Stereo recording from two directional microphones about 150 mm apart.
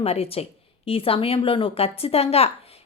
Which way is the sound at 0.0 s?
40° left (ahead or behind).